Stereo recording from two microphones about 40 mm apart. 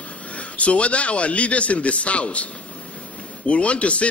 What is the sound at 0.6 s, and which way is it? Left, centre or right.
A man's voice, left.